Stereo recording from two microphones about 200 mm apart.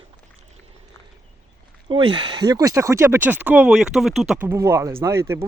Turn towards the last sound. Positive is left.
turn(degrees=-15)  # may be behind; listen again after turning